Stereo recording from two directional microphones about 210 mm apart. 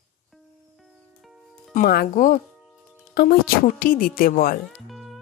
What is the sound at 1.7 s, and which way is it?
A woman's voice, 45° left (ahead or behind).